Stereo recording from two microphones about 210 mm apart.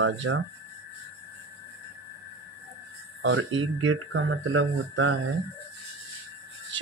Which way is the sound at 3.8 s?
75° right (ahead or behind).